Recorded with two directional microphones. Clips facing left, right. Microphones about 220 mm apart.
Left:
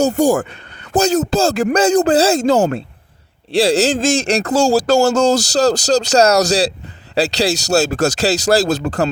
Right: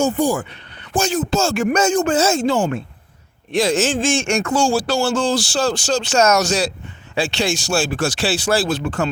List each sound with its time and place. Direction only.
0.0 s speech: 45° left (ahead or behind)